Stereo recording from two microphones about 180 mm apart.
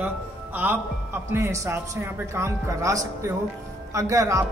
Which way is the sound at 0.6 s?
10° right (ahead or behind).